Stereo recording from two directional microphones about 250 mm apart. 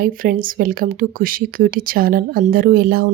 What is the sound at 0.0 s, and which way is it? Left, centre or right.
Speech, right.